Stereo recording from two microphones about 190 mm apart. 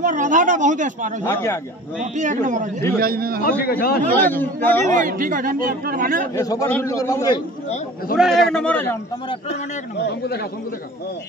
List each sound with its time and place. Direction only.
0.0 s speech: 45° right (ahead or behind)
1.2 s a man's voice: 15° left (ahead or behind)
2.1 s a man's voice: 40° right (ahead or behind)
3.0 s speech: 50° right (ahead or behind)
3.6 s a man's voice: 55° left (ahead or behind)
4.1 s a man's voice: 10° left (ahead or behind)
4.8 s speech: 45° right (ahead or behind)
6.3 s a man's voice: 15° left (ahead or behind)
8.2 s a man's voice: centre (ahead or behind)
9.5 s a man's voice: 60° left (ahead or behind)